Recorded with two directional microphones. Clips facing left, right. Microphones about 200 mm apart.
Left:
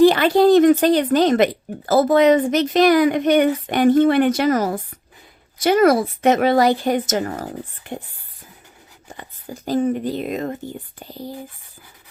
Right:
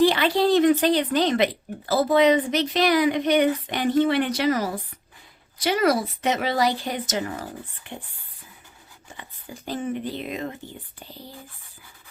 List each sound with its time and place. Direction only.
0.0 s a woman's voice: 45° left (ahead or behind)
9.1 s a woman's voice: 40° left (ahead or behind)